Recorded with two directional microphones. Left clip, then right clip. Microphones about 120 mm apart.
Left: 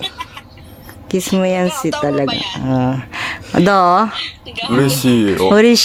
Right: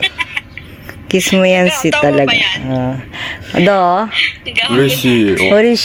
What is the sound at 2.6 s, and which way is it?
Speech, 40° left (ahead or behind).